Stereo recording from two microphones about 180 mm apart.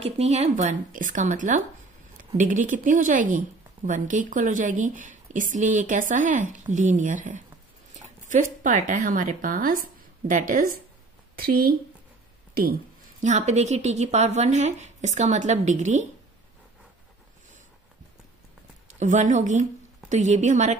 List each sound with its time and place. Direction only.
0.0 s a woman's voice: 35° right (ahead or behind); by 11.7 s 55° right (ahead or behind)
13.2 s a woman's voice: 40° right (ahead or behind)
18.9 s a woman's voice: 40° right (ahead or behind)